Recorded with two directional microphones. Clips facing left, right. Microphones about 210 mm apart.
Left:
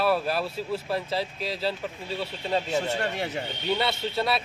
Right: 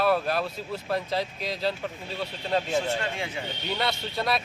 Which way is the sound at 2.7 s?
40° left (ahead or behind).